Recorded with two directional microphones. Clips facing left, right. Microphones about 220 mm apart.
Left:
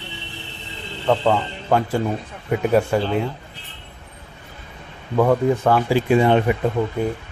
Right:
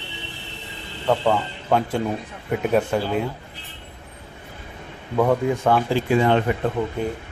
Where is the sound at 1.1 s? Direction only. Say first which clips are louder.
Left 2 dB; 5° right (ahead or behind).